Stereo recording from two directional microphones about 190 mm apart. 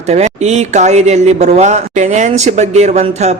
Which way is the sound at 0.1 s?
35° right (ahead or behind).